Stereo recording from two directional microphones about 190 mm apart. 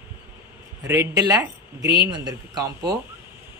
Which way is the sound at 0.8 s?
15° right (ahead or behind).